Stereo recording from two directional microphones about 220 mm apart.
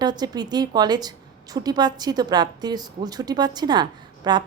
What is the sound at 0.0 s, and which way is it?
A woman's voice, 20° right (ahead or behind).